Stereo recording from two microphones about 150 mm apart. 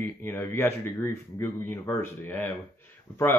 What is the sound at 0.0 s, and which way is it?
Speech, 15° left (ahead or behind).